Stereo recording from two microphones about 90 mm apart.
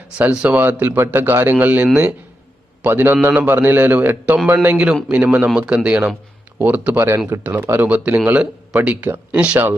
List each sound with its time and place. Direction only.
0.2 s speech: 15° right (ahead or behind)